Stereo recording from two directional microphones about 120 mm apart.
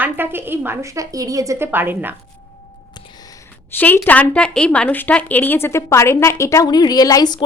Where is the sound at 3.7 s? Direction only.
15° left (ahead or behind).